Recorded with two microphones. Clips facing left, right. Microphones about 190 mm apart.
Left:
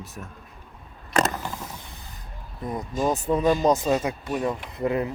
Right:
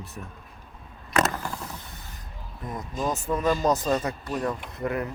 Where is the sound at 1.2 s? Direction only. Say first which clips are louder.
Left 1 dB; 20° left (ahead or behind).